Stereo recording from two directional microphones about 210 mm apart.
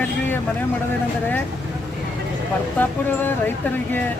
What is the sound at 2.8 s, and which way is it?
Speech, 10° left (ahead or behind).